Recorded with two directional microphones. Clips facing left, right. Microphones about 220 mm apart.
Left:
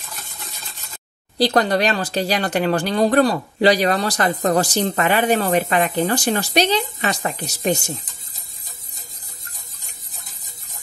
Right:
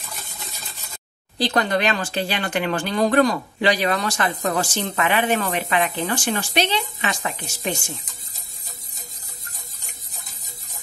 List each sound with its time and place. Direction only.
1.4 s speech: 35° left (ahead or behind)